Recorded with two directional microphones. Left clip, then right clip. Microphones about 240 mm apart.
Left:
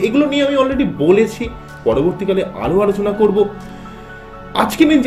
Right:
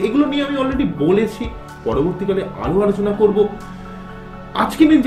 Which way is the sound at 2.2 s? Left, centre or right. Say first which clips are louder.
Left 3 dB; left.